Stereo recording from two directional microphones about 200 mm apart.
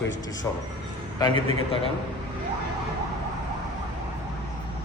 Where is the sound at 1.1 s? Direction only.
20° left (ahead or behind).